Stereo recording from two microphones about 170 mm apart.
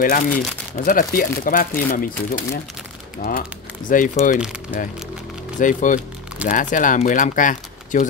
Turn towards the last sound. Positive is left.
turn(degrees=50)  # may be behind; listen again after turning